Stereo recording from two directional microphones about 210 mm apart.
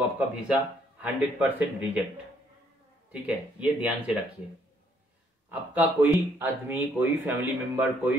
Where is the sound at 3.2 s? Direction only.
5° right (ahead or behind).